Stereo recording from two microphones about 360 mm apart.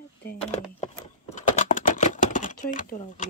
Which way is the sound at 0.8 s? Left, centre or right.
Centre.